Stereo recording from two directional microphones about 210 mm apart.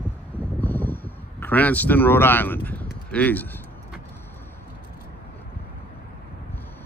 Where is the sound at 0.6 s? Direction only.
10° left (ahead or behind).